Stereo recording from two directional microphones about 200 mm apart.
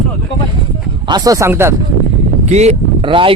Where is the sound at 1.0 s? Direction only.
20° right (ahead or behind).